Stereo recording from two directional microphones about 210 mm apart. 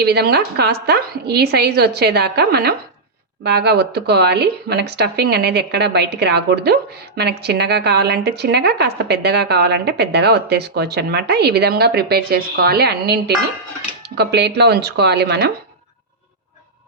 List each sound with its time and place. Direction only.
0.0 s speech: 50° right (ahead or behind)